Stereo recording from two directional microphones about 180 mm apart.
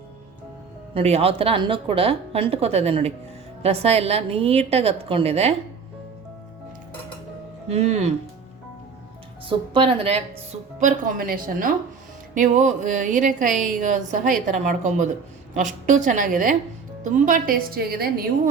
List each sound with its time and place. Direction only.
0.9 s speech: 35° right (ahead or behind)
7.7 s speech: 40° right (ahead or behind)
9.5 s a woman's voice: 30° right (ahead or behind); by 18.1 s 60° right (ahead or behind)